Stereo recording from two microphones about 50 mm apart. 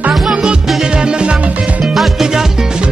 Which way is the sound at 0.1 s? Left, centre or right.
Centre.